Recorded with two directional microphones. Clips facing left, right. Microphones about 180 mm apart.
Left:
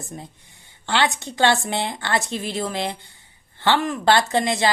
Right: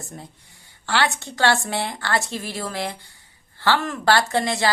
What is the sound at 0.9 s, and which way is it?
A woman's voice, 20° left (ahead or behind).